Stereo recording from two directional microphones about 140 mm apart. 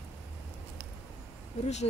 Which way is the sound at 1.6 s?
50° left (ahead or behind).